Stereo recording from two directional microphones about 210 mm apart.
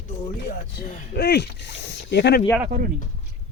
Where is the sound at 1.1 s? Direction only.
50° left (ahead or behind).